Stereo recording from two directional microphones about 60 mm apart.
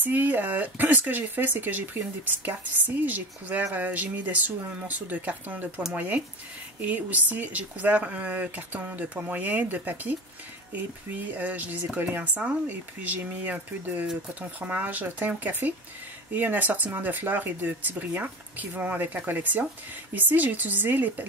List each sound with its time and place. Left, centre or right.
0.0 s speech: right